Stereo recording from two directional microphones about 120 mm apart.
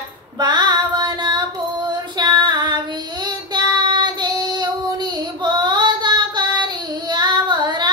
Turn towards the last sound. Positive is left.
turn(degrees=-40)  # may be behind; listen again after turning